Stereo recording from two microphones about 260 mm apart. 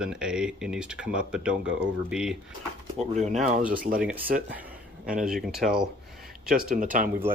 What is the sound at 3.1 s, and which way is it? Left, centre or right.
Speech, right.